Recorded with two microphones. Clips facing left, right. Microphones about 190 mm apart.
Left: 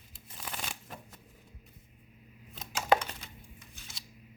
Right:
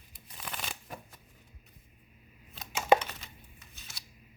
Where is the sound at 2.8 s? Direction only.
20° right (ahead or behind).